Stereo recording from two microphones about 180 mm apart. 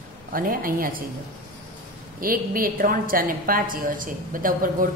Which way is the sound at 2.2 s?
55° right (ahead or behind).